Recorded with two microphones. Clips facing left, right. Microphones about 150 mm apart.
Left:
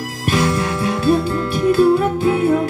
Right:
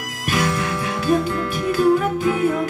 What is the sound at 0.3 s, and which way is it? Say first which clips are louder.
Music: left 4 dB; 30° left (ahead or behind).